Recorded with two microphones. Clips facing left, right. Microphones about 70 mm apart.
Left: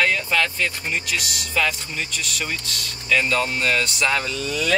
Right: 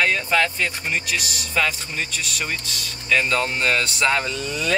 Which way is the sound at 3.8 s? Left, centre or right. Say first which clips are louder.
Right 1 dB; right.